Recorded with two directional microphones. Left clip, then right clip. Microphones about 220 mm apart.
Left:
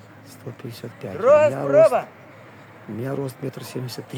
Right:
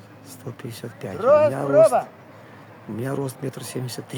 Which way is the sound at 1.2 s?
25° left (ahead or behind).